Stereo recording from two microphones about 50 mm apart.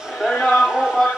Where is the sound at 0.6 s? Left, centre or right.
Centre.